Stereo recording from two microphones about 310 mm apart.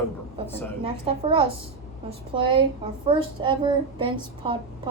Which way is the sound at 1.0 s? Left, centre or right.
Centre.